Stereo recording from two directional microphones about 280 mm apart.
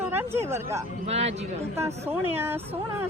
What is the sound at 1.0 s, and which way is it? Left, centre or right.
Speech, right.